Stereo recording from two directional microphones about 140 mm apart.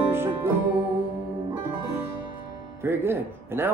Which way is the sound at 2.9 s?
15° right (ahead or behind).